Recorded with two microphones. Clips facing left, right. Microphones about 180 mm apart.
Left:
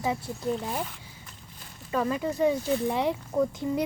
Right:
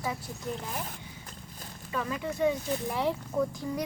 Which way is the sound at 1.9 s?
35° left (ahead or behind).